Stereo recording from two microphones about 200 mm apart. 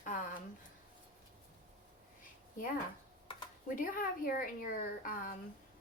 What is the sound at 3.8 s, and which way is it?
A woman's voice, 45° left (ahead or behind).